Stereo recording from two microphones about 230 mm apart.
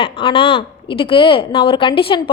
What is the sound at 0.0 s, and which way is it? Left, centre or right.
A woman's voice, left.